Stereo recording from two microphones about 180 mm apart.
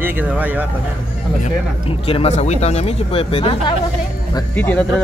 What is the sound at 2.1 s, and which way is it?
Speech, 35° left (ahead or behind).